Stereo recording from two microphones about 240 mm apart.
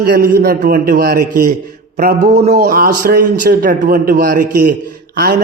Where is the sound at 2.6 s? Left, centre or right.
Right.